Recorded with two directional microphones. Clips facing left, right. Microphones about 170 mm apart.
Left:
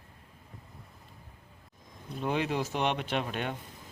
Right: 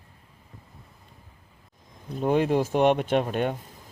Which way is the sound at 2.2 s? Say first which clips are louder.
Right 8 dB; 45° right (ahead or behind).